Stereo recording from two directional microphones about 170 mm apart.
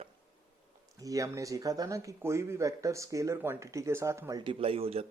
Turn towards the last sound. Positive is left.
turn(degrees=-35)  # may be behind; listen again after turning